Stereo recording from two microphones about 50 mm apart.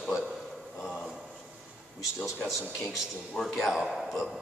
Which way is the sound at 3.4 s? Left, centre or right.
Centre.